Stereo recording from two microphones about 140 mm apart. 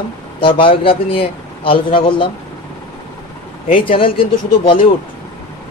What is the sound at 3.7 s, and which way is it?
Speech, 40° left (ahead or behind).